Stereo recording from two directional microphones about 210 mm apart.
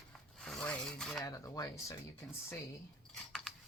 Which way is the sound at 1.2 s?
15° left (ahead or behind).